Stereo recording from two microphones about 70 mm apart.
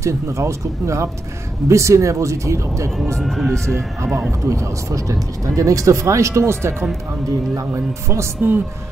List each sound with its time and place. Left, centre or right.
0.0 s speech: right
3.2 s speech: centre
4.5 s speech: right